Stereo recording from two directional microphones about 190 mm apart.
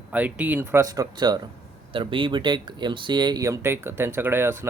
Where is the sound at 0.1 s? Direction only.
10° right (ahead or behind).